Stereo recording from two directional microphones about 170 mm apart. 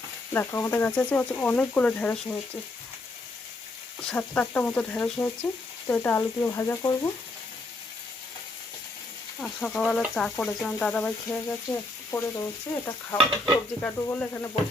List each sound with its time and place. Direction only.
0.3 s speech: 15° left (ahead or behind)
4.1 s speech: 10° left (ahead or behind)
9.4 s speech: 5° left (ahead or behind)
13.1 s speech: 5° left (ahead or behind)